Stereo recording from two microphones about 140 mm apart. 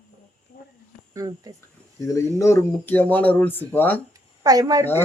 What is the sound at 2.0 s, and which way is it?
A man's voice, 20° left (ahead or behind).